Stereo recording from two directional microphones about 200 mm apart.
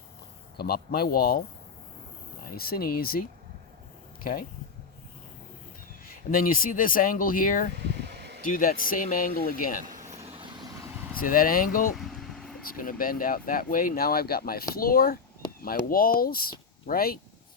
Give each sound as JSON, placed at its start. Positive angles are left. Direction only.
{"t": 0.5, "sound": "speech", "side_deg": 50}
{"t": 2.5, "sound": "speech", "side_deg": 50}
{"t": 6.1, "sound": "speech", "side_deg": 45}
{"t": 7.9, "sound": "a sound", "side_deg": -55}
{"t": 8.4, "sound": "speech", "side_deg": 45}
{"t": 9.8, "sound": "a sound", "side_deg": -40}
{"t": 10.8, "sound": "vehicle", "side_deg": -15}
{"t": 11.2, "sound": "speech", "side_deg": 45}
{"t": 11.9, "sound": "vehicle", "side_deg": 0}
{"t": 12.7, "sound": "speech", "side_deg": 45}